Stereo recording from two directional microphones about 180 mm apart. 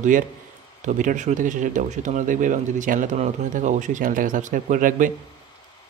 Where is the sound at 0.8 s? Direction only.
45° right (ahead or behind).